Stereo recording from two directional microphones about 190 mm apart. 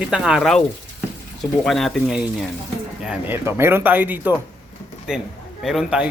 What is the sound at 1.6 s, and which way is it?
Speech, centre (ahead or behind).